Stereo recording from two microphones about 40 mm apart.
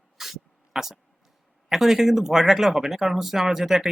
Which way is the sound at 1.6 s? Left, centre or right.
Centre.